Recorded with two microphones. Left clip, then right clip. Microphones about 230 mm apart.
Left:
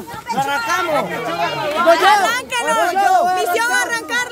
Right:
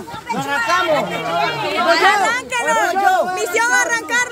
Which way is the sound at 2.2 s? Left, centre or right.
Centre.